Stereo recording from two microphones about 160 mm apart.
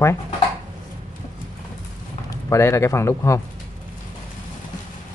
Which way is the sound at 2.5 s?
15° left (ahead or behind).